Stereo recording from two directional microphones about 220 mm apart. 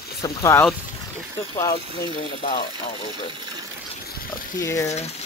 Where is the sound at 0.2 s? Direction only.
15° left (ahead or behind).